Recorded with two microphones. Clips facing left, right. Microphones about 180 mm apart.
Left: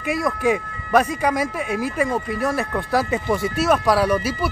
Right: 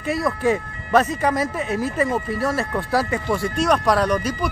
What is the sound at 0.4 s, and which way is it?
Speech, 10° left (ahead or behind).